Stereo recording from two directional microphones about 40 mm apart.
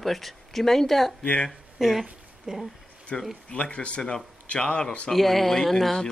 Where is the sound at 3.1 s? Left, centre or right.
Centre.